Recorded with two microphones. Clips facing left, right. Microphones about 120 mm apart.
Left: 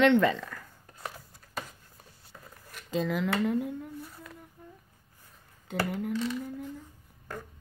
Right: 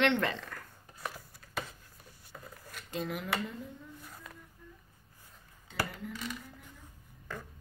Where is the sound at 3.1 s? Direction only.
70° left (ahead or behind).